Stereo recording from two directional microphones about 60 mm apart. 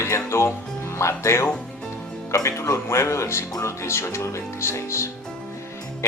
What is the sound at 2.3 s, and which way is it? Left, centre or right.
Speech, left.